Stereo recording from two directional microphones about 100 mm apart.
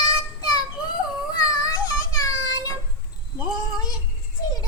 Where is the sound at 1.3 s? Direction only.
35° left (ahead or behind).